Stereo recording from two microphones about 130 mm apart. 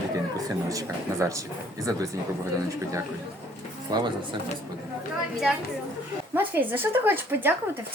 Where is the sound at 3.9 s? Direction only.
30° right (ahead or behind).